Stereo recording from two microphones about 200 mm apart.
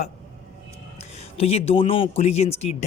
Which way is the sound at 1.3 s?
30° left (ahead or behind).